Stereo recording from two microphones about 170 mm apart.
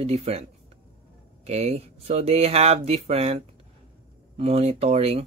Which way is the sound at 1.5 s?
40° right (ahead or behind).